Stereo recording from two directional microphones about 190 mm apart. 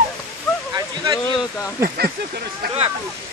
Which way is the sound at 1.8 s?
50° right (ahead or behind).